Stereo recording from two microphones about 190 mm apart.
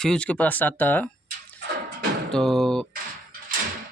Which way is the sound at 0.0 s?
5° left (ahead or behind).